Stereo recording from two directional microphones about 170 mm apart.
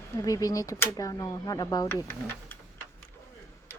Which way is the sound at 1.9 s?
10° left (ahead or behind).